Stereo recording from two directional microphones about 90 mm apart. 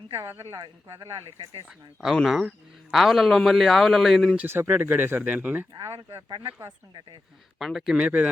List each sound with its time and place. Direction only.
0.2 s speech: 30° right (ahead or behind)
2.1 s a man's voice: 5° left (ahead or behind)
4.4 s speech: 25° right (ahead or behind)
5.7 s speech: 45° right (ahead or behind)
7.6 s speech: centre (ahead or behind)